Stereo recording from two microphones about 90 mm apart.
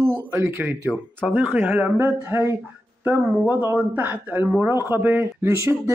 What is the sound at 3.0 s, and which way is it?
Speech, 15° right (ahead or behind).